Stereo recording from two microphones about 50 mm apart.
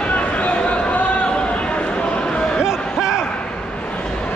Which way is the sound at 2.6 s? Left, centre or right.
Centre.